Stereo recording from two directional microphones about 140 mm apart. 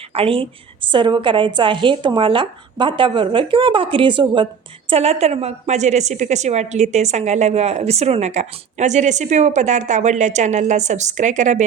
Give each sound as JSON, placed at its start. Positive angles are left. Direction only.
{"t": 0.1, "sound": "a woman's voice", "side_deg": -45}
{"t": 4.9, "sound": "a woman's voice", "side_deg": -50}